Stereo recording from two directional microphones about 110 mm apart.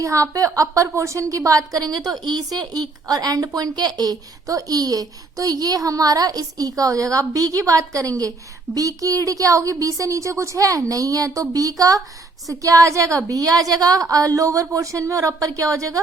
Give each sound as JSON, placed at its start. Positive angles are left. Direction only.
{"t": 0.0, "sound": "a woman's voice", "side_deg": -30}